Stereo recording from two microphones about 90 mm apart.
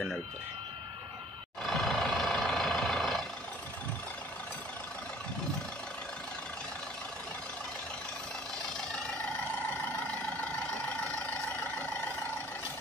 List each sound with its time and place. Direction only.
1.7 s vehicle: centre (ahead or behind)